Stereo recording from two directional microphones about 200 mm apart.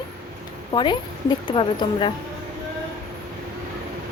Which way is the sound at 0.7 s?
25° left (ahead or behind).